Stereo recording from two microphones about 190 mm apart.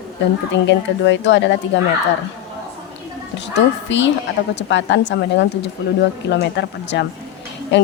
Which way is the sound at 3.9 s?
70° left (ahead or behind).